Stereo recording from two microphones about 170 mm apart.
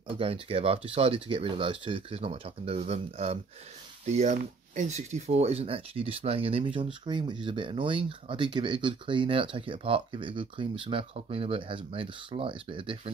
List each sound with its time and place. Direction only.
0.2 s speech: 35° right (ahead or behind)